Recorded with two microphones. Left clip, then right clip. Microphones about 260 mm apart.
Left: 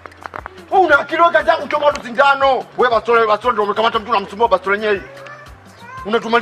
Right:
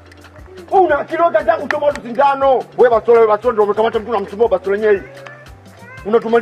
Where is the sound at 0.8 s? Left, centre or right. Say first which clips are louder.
Left 2 dB; centre.